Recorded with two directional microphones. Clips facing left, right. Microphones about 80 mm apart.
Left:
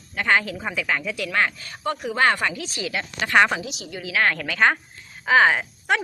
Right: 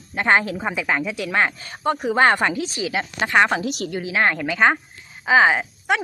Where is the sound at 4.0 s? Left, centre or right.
Right.